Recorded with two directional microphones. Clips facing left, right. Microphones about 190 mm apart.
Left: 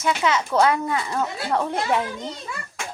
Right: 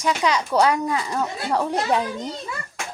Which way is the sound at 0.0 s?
15° right (ahead or behind).